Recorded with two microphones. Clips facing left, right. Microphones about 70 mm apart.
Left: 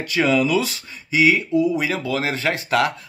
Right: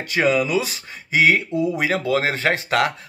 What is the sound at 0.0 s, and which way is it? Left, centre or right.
Speech, right.